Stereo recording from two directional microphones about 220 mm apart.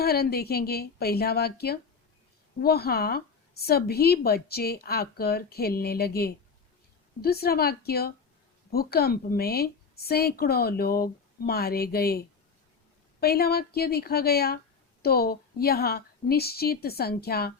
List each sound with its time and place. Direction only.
0.0 s a woman's voice: 45° left (ahead or behind)